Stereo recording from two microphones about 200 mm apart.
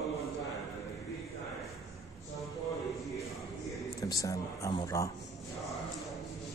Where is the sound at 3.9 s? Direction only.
15° left (ahead or behind).